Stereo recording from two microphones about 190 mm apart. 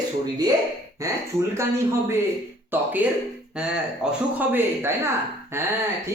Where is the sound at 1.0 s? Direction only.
15° right (ahead or behind).